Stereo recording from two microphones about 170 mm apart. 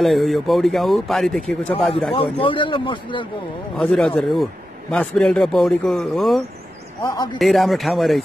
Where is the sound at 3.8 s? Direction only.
5° left (ahead or behind).